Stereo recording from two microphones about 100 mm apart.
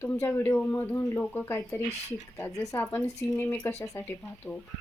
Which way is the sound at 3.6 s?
20° left (ahead or behind).